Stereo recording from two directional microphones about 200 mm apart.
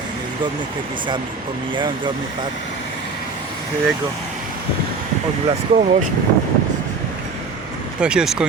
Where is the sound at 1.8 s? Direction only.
25° right (ahead or behind).